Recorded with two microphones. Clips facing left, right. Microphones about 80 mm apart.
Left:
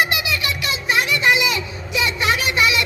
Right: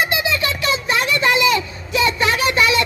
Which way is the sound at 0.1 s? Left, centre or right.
Right.